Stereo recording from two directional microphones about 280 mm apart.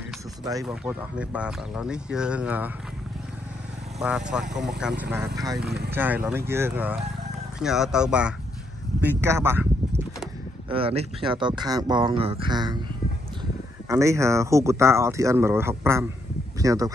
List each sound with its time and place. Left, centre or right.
0.5 s speech: centre
4.0 s speech: centre
5.6 s speech: right
5.9 s speech: centre
10.7 s speech: centre
13.8 s speech: centre